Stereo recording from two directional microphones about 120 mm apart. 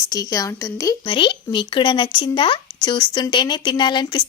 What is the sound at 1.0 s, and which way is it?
Speech, 45° left (ahead or behind).